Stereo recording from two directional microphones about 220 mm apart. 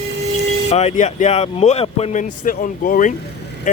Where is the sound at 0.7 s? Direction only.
30° left (ahead or behind).